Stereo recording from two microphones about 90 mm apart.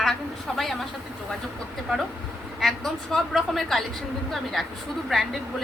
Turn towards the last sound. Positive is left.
turn(degrees=0)  # may be behind; listen again after turning